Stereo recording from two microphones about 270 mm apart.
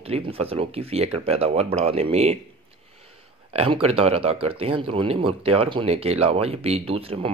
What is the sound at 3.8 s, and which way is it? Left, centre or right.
Speech, right.